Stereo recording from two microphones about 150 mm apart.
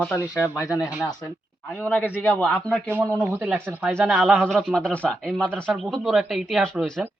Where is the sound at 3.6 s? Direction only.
10° right (ahead or behind).